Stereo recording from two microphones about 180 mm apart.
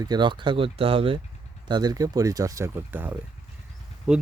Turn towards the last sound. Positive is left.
turn(degrees=-5)  # may be behind; listen again after turning